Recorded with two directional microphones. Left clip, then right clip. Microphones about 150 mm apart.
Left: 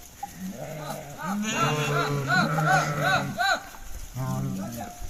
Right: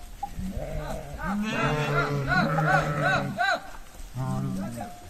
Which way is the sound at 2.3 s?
Centre (ahead or behind).